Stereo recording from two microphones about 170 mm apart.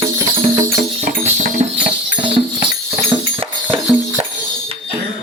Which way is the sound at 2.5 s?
35° right (ahead or behind).